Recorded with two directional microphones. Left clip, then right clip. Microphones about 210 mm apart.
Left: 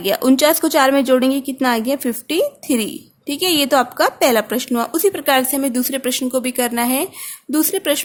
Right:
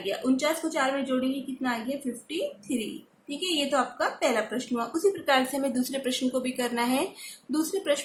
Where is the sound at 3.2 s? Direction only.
50° left (ahead or behind).